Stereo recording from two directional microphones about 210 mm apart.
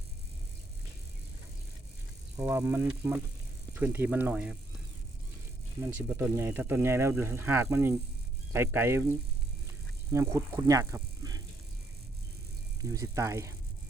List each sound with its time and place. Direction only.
2.3 s speech: 10° right (ahead or behind)
5.8 s speech: 10° right (ahead or behind)
10.1 s speech: 15° right (ahead or behind)
12.8 s speech: 15° right (ahead or behind)